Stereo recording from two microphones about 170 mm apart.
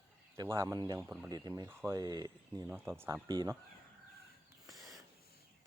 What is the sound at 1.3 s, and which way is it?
Speech, 20° right (ahead or behind).